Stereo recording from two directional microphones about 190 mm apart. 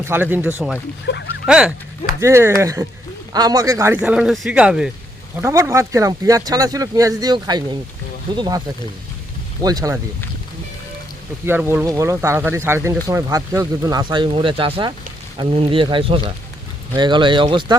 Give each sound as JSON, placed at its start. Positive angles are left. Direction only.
{"t": 0.0, "sound": "speech", "side_deg": -10}
{"t": 1.1, "sound": "speech", "side_deg": 65}
{"t": 1.5, "sound": "speech", "side_deg": -5}
{"t": 4.0, "sound": "speech", "side_deg": -5}
{"t": 11.4, "sound": "speech", "side_deg": -10}